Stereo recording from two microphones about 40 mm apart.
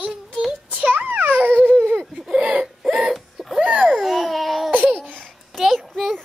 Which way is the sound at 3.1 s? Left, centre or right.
Centre.